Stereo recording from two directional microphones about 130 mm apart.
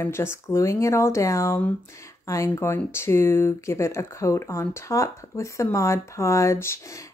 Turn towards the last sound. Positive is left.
turn(degrees=20)  # may be behind; listen again after turning